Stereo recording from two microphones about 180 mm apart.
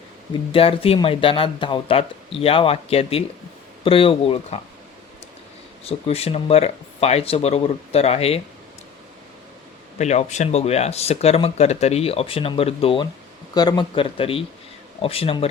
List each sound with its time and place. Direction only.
0.5 s speech: 30° left (ahead or behind)
5.8 s speech: 35° left (ahead or behind)
10.0 s speech: 40° left (ahead or behind)